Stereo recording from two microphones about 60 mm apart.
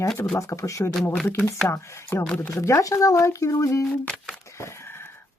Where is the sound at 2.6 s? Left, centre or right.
Left.